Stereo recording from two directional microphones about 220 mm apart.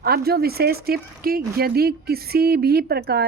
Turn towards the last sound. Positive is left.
turn(degrees=-45)  # may be behind; listen again after turning